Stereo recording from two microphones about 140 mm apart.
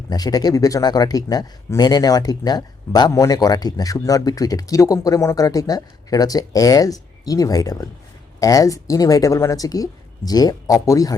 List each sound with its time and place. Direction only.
0.1 s speech: 30° left (ahead or behind)